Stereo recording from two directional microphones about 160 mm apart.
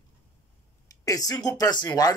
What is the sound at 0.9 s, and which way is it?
Speech, 20° left (ahead or behind).